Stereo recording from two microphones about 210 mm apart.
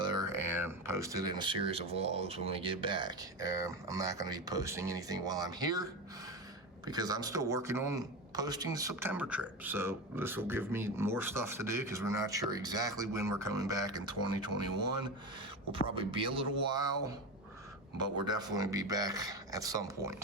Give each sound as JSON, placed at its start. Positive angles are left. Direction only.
{"t": 0.0, "sound": "speech", "side_deg": -20}
{"t": 16.0, "sound": "speech", "side_deg": -25}
{"t": 18.3, "sound": "speech", "side_deg": -20}